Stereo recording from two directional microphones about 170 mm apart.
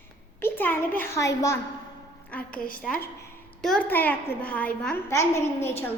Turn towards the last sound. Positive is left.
turn(degrees=15)  # may be behind; listen again after turning